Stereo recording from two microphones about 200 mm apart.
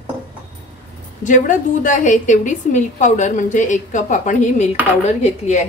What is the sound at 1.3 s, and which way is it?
A woman's voice, 40° left (ahead or behind).